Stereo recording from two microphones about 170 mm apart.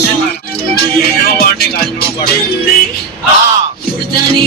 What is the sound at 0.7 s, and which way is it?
Music, 65° left (ahead or behind).